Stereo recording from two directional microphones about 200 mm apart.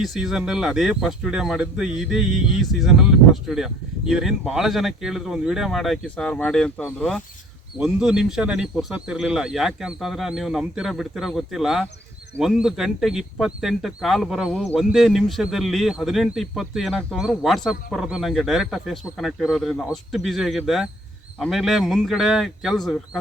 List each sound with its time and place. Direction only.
0.0 s speech: centre (ahead or behind)